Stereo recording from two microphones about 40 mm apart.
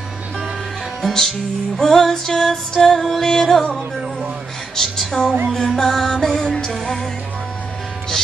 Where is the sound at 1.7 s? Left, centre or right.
Centre.